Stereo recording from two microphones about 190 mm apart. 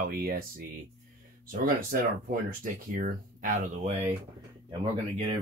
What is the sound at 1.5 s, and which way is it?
Speech, 45° right (ahead or behind).